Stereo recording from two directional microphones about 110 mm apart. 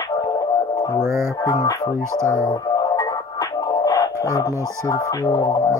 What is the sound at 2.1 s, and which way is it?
Speech, 25° right (ahead or behind).